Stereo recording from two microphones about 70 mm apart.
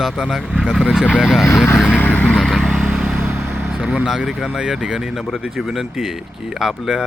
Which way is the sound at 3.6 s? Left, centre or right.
Centre.